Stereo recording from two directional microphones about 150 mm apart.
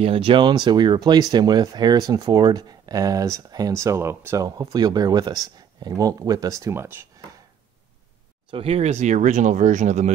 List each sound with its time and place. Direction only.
0.0 s speech: 35° right (ahead or behind); by 7.1 s 15° right (ahead or behind)
8.5 s speech: 40° right (ahead or behind)